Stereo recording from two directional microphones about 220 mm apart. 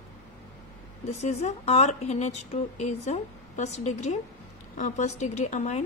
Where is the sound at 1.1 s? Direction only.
30° left (ahead or behind).